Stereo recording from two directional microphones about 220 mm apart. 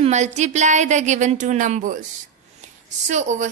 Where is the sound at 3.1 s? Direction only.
30° right (ahead or behind).